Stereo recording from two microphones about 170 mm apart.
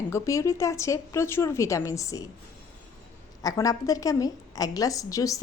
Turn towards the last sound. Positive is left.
turn(degrees=20)  # may be behind; listen again after turning